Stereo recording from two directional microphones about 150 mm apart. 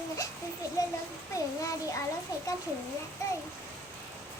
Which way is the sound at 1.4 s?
20° left (ahead or behind).